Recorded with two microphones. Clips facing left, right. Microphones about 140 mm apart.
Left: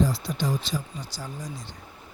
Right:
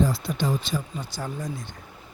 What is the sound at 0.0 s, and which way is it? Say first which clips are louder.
Speech: right 1 dB; 55° right (ahead or behind).